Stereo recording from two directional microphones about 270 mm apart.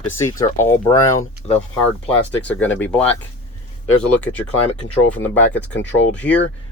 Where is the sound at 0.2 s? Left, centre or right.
Centre.